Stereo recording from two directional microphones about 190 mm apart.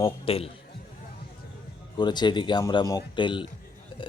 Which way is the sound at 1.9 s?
25° left (ahead or behind).